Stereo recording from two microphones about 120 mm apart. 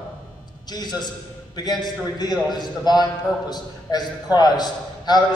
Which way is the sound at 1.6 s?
35° left (ahead or behind).